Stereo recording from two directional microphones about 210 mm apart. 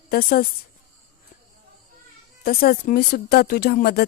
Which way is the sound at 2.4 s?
45° left (ahead or behind).